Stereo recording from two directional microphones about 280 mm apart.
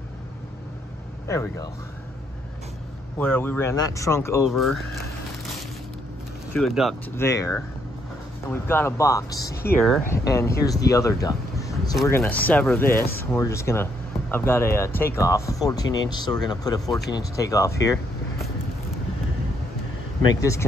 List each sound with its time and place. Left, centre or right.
1.2 s speech: centre
3.2 s speech: centre
6.5 s speech: centre
9.4 s speech: left
9.7 s speech: centre
12.9 s speech: left
13.2 s speech: centre
20.3 s speech: centre